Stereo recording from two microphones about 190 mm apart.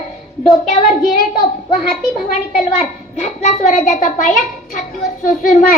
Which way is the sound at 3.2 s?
40° left (ahead or behind).